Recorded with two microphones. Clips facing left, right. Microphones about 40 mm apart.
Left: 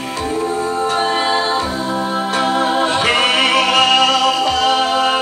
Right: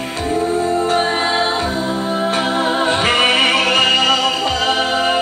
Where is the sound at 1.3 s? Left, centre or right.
Right.